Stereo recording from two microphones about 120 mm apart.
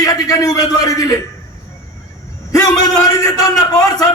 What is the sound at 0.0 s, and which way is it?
A man's voice, 30° left (ahead or behind).